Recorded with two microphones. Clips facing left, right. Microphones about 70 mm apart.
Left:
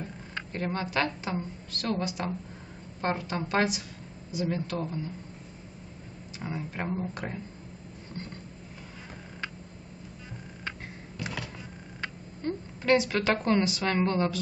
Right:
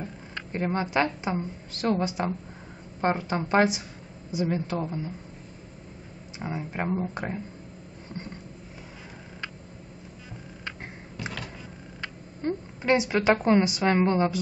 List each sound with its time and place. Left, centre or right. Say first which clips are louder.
0.0 s speech: right 1 dB; centre
6.4 s speech: right 3 dB; right
12.4 s a woman's voice: right 3 dB; right